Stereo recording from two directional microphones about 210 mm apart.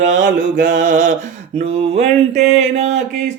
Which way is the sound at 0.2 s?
45° right (ahead or behind).